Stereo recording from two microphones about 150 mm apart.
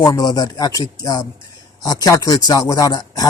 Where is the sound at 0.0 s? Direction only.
25° left (ahead or behind).